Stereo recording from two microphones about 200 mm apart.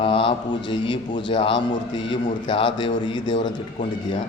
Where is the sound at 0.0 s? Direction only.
25° left (ahead or behind).